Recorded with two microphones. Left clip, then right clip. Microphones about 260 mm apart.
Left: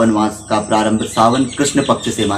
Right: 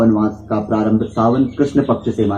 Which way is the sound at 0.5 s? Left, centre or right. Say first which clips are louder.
Left 5 dB; left.